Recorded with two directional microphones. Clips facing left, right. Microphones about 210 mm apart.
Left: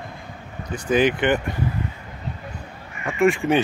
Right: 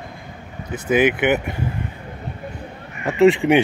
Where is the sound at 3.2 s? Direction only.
15° right (ahead or behind).